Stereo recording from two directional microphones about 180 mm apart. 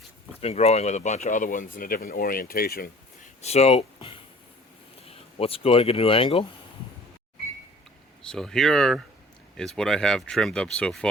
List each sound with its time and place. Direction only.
0.3 s speech: 35° left (ahead or behind); by 2.9 s 55° left (ahead or behind)
3.4 s speech: 35° left (ahead or behind)
8.2 s speech: 5° left (ahead or behind)